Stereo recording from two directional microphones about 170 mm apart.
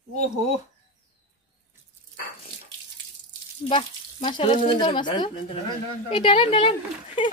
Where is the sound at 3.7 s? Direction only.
30° left (ahead or behind).